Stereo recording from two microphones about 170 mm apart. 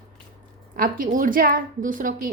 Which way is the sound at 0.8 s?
55° right (ahead or behind).